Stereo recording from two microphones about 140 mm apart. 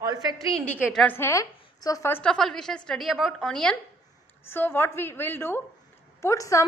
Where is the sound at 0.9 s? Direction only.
15° left (ahead or behind).